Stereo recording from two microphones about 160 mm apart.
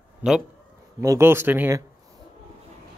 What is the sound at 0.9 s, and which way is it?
Speech, 15° right (ahead or behind).